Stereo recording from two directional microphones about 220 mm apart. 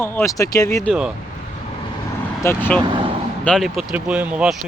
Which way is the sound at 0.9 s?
5° right (ahead or behind).